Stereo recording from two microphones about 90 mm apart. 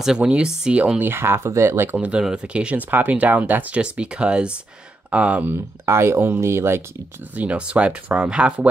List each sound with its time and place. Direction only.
0.0 s speech: 10° right (ahead or behind); by 2.0 s 25° right (ahead or behind)
2.0 s speech: 10° right (ahead or behind)
5.5 s speech: 30° right (ahead or behind)
7.3 s speech: 15° right (ahead or behind)